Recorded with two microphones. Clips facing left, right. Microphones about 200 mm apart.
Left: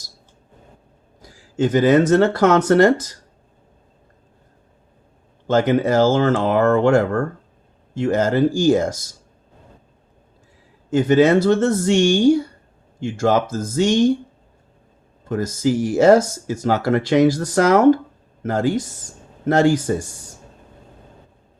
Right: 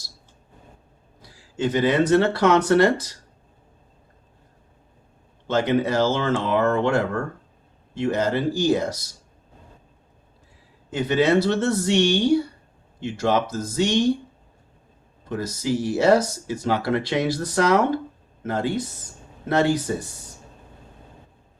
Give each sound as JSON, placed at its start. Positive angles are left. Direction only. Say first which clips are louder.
{"t": 1.2, "sound": "speech", "louder": "left 5 dB", "side_deg": 45}
{"t": 5.5, "sound": "speech", "louder": "left 4 dB", "side_deg": 45}
{"t": 10.9, "sound": "speech", "louder": "left 5 dB", "side_deg": 45}
{"t": 15.2, "sound": "speech", "louder": "left 7 dB", "side_deg": 50}